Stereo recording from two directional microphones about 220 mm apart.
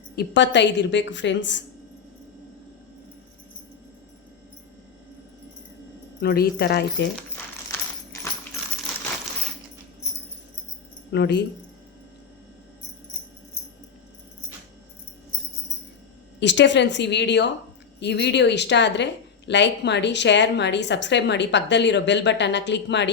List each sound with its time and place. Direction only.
0.2 s a woman's voice: 55° left (ahead or behind)
6.2 s a woman's voice: 45° left (ahead or behind)
11.1 s a woman's voice: 50° left (ahead or behind)
16.4 s a woman's voice: 55° left (ahead or behind)